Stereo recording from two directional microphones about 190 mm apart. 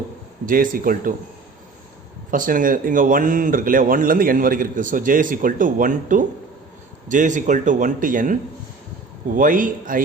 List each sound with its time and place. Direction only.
0.4 s speech: 45° right (ahead or behind)
2.3 s speech: 45° right (ahead or behind)